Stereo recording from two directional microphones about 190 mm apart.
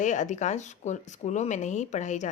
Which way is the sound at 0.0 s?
40° left (ahead or behind).